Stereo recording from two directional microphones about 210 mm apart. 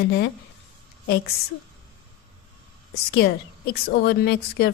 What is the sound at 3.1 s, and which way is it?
Speech, 50° left (ahead or behind).